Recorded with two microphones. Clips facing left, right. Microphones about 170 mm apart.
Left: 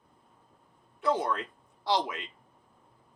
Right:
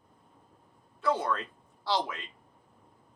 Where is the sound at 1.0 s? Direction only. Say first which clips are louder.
Left 1 dB; 15° left (ahead or behind).